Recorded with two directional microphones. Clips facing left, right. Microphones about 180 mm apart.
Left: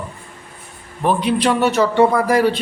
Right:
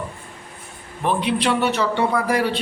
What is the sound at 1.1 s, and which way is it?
Speech, 40° left (ahead or behind).